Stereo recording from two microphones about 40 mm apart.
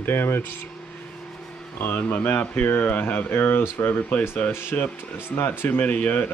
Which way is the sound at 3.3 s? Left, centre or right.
Left.